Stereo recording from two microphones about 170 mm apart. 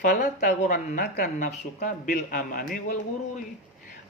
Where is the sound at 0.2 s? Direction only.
45° left (ahead or behind).